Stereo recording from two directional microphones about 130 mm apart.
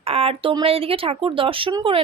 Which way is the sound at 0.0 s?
50° right (ahead or behind).